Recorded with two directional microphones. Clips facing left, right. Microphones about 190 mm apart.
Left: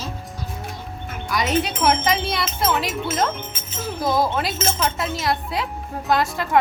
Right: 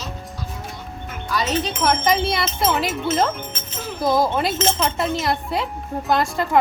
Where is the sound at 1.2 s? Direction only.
10° left (ahead or behind).